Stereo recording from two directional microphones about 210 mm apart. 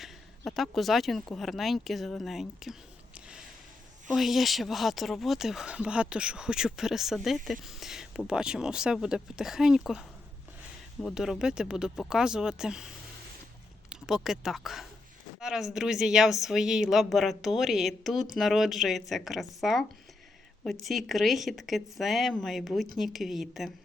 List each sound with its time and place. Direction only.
0.0 s a woman's voice: centre (ahead or behind)
3.2 s a sound: 5° right (ahead or behind)
4.1 s a woman's voice: centre (ahead or behind)
13.9 s a woman's voice: centre (ahead or behind)